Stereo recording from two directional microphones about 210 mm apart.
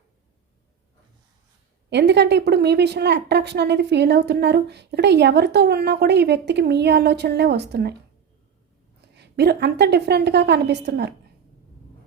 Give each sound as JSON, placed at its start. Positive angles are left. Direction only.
{"t": 1.9, "sound": "a woman's voice", "side_deg": -55}
{"t": 9.1, "sound": "a woman's voice", "side_deg": -55}